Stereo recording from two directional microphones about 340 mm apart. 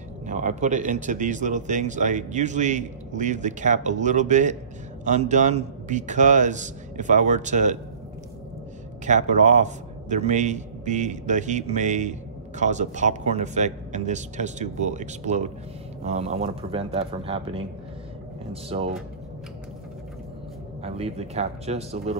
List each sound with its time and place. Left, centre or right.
0.3 s a man's voice: right
9.0 s a man's voice: right
20.8 s a man's voice: centre